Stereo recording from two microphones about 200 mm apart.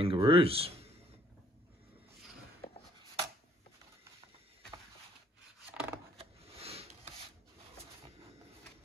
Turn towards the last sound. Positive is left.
turn(degrees=-30)  # may be behind; listen again after turning